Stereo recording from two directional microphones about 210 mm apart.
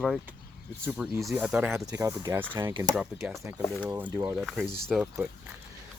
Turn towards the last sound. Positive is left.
turn(degrees=-5)  # may be behind; listen again after turning